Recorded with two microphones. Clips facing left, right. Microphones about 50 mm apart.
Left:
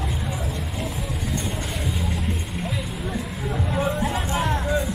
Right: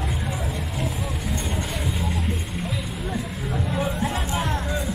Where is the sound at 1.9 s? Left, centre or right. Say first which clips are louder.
Even; centre.